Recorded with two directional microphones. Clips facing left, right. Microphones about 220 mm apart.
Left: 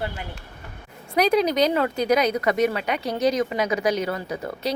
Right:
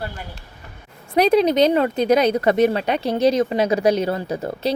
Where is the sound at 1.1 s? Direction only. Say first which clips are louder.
Right 4 dB; 25° right (ahead or behind).